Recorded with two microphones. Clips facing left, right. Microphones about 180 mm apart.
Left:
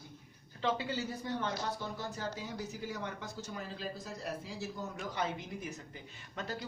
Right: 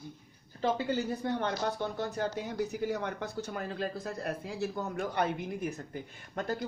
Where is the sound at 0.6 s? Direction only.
50° right (ahead or behind).